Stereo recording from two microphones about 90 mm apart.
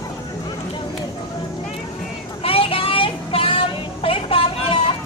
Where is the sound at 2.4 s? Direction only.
90° left.